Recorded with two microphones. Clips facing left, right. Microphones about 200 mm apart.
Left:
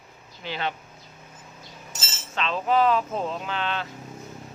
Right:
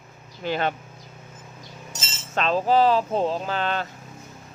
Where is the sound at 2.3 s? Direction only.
40° right (ahead or behind).